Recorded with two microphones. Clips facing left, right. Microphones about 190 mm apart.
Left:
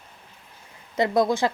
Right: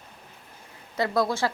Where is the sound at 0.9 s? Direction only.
20° left (ahead or behind).